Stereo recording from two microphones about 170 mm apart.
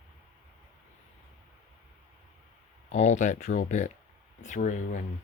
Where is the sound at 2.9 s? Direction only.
45° left (ahead or behind).